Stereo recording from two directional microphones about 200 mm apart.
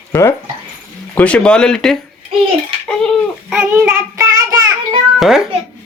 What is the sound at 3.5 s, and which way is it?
Child singing, 5° right (ahead or behind).